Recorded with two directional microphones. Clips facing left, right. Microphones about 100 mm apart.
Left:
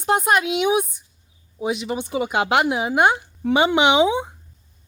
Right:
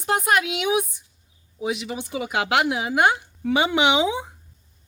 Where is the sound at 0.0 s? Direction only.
25° left (ahead or behind).